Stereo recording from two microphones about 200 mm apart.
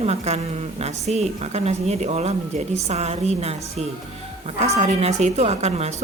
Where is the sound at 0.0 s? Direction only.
30° right (ahead or behind).